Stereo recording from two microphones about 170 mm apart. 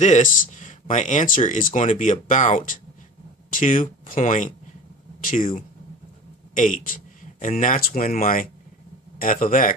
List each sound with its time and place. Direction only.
0.0 s speech: 45° left (ahead or behind)
6.5 s speech: 50° left (ahead or behind)